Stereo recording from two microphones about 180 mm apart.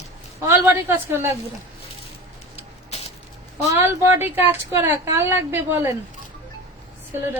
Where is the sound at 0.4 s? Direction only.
15° right (ahead or behind).